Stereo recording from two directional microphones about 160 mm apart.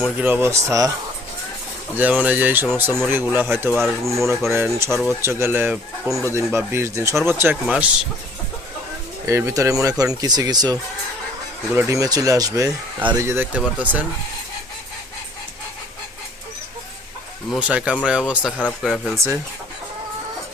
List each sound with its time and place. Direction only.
0.2 s speech: 10° right (ahead or behind)
2.0 s speech: 10° right (ahead or behind)
9.2 s speech: 20° right (ahead or behind)
17.5 s speech: 5° right (ahead or behind)
19.1 s speech: 15° right (ahead or behind)